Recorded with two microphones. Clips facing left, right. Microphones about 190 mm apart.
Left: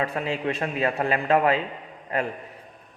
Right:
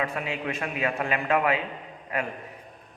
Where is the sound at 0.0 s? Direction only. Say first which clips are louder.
Left 3 dB; 35° left (ahead or behind).